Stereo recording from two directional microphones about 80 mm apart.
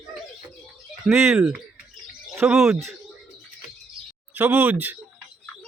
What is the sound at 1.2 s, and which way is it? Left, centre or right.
Speech, centre.